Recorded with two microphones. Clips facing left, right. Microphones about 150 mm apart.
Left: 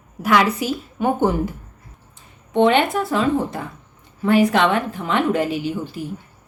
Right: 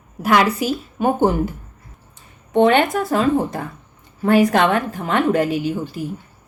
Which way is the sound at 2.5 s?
45° right (ahead or behind).